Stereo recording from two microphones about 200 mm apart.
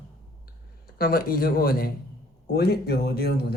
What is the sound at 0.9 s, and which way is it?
Speech, 50° left (ahead or behind).